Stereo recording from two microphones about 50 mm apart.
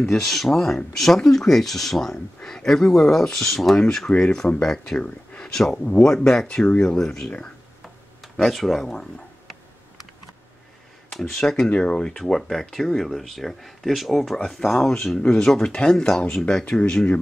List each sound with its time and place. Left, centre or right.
0.0 s speech: centre
8.4 s speech: centre
11.1 s speech: centre
12.2 s speech: centre; by 17.2 s left